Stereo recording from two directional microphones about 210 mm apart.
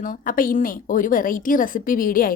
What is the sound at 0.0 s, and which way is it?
A woman's voice, 40° left (ahead or behind).